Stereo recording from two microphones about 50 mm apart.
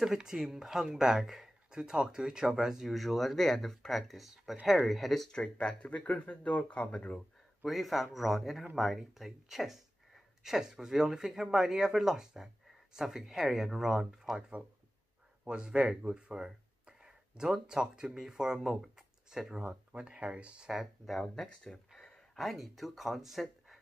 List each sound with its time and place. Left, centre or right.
0.0 s speech: centre
5.6 s speech: left
7.6 s speech: centre
15.4 s speech: centre
18.8 s a sound: centre
19.6 s speech: right
20.7 s speech: centre
21.5 s a sound: centre
22.4 s speech: centre